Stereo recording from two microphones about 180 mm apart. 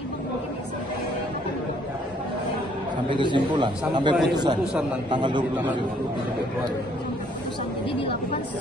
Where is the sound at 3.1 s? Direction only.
25° right (ahead or behind).